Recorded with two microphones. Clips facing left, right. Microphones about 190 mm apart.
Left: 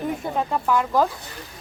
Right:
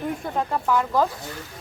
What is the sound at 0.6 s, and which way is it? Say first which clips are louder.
Speech: left 1 dB; 5° left (ahead or behind).